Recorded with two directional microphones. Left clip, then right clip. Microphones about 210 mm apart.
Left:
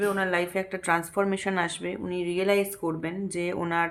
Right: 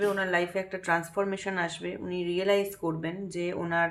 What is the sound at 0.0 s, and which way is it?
Speech, 25° left (ahead or behind).